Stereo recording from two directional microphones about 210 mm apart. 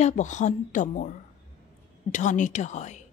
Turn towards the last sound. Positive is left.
turn(degrees=35)  # may be behind; listen again after turning